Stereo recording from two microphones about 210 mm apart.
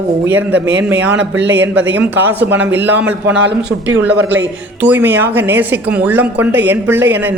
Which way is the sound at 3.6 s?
60° right (ahead or behind).